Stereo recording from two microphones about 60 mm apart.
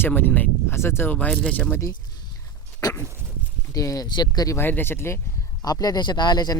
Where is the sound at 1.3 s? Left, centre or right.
Left.